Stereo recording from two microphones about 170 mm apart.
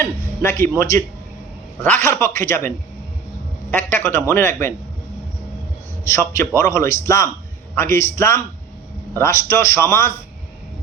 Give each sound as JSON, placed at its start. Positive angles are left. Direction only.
{"t": 0.0, "sound": "a man's voice", "side_deg": 15}
{"t": 6.1, "sound": "a man's voice", "side_deg": 15}